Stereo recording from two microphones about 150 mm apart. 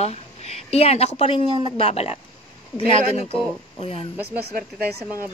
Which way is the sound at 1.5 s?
30° right (ahead or behind).